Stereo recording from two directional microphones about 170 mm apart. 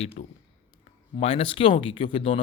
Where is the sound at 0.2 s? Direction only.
40° left (ahead or behind).